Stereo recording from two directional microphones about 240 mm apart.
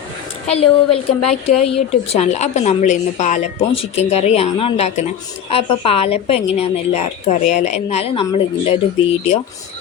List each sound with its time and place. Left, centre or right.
0.5 s a woman's voice: left